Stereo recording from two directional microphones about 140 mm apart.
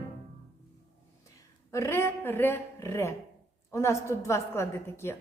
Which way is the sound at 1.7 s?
20° left (ahead or behind).